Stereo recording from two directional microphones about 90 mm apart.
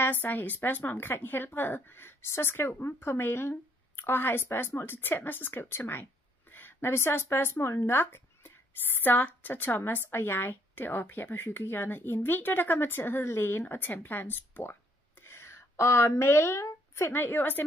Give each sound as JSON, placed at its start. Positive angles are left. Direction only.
{"t": 0.0, "sound": "a woman's voice", "side_deg": 20}